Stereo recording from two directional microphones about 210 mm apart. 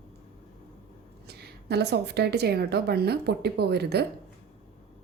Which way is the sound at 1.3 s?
50° right (ahead or behind).